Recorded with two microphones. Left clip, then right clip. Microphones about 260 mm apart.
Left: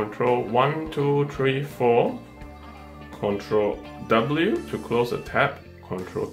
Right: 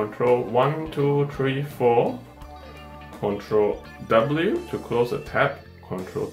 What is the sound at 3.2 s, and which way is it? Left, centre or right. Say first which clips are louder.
Speech: right 1 dB; centre.